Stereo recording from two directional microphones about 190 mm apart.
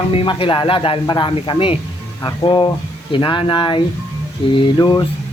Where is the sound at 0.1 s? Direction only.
30° left (ahead or behind).